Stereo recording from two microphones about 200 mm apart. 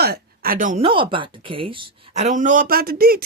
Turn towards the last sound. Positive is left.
turn(degrees=-50)  # may be behind; listen again after turning